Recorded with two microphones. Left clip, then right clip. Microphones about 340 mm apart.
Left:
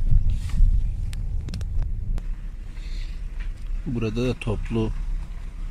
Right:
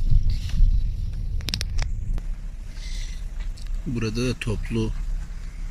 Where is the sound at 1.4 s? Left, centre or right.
Right.